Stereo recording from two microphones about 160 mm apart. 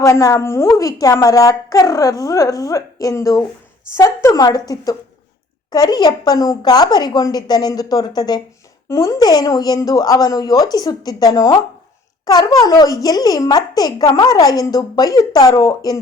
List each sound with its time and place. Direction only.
0.0 s a woman's voice: 20° left (ahead or behind)